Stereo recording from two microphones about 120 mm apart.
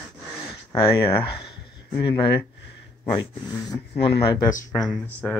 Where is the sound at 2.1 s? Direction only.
40° left (ahead or behind).